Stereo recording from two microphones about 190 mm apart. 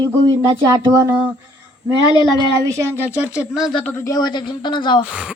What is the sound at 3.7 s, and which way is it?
Speech, 10° left (ahead or behind).